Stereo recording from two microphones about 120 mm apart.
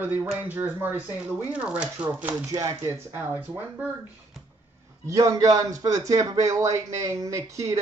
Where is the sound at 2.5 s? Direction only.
30° right (ahead or behind).